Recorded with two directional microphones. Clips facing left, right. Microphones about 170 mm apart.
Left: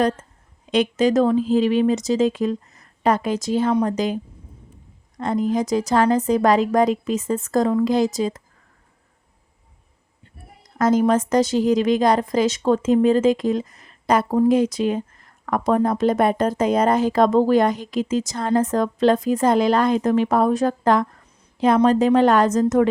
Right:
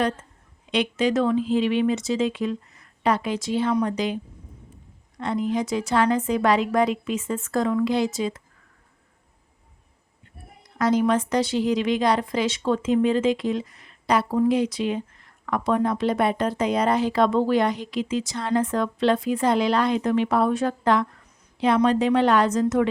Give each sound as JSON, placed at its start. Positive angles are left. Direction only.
{"t": 0.7, "sound": "speech", "side_deg": 45}
{"t": 10.6, "sound": "a woman's voice", "side_deg": 45}